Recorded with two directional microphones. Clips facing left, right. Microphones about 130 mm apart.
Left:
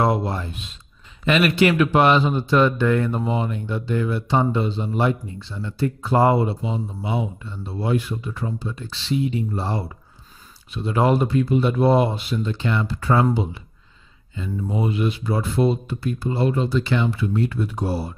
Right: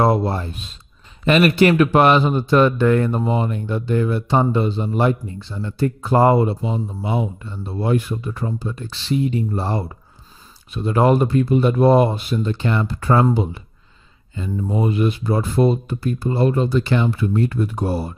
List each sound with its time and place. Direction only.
0.0 s a man's voice: 35° right (ahead or behind)